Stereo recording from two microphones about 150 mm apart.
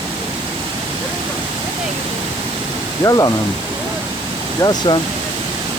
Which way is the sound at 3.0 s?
25° left (ahead or behind).